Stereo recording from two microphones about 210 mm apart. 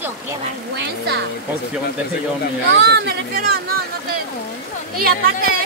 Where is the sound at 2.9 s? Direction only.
50° right (ahead or behind).